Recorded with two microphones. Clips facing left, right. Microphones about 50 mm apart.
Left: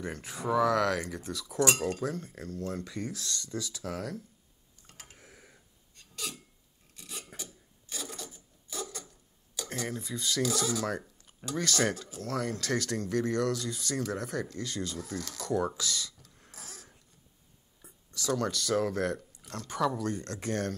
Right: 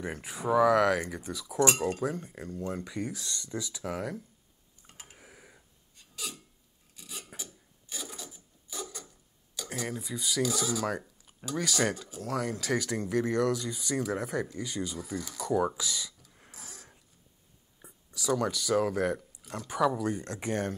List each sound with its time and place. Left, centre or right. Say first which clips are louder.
0.0 s speech: right 1 dB; centre
4.8 s hiccup: right 1 dB; right
7.0 s filing: even; centre
7.9 s mechanisms: left 1 dB; centre
9.6 s speech: even; centre
17.8 s a sound: right 3 dB; right
18.1 s speech: right 2 dB; centre